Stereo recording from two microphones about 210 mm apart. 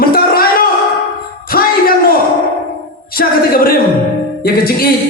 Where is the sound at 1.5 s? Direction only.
45° left (ahead or behind).